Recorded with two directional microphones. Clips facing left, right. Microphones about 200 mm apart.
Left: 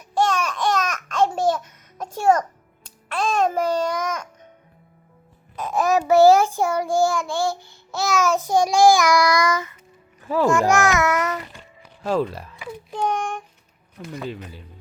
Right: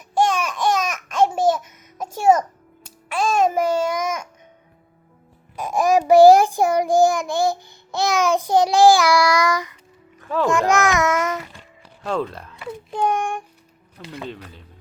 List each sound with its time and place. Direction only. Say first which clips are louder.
0.1 s babbling: right 1 dB; 15° right (ahead or behind)
5.5 s child singing: right 2 dB; 10° right (ahead or behind)
8.4 s child singing: right 2 dB; 10° left (ahead or behind)
9.3 s child singing: right 1 dB; 15° right (ahead or behind)
10.4 s a child's voice: even; 20° right (ahead or behind)
12.0 s a sound: left 2 dB; 5° left (ahead or behind)
13.0 s child singing: right 3 dB; 10° right (ahead or behind)
14.2 s speech: left 1 dB; 5° left (ahead or behind)